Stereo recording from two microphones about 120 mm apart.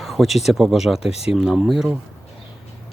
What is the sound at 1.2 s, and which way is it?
Speech, 5° right (ahead or behind).